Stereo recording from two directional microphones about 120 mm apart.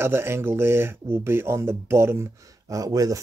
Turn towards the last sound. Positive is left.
turn(degrees=-30)  # may be behind; listen again after turning